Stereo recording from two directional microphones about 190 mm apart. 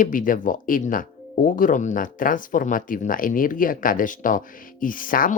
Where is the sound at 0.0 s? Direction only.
45° left (ahead or behind).